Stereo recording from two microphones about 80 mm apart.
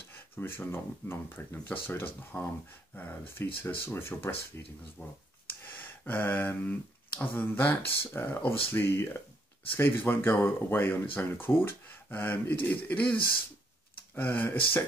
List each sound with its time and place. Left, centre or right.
0.4 s speech: left
5.6 s speech: left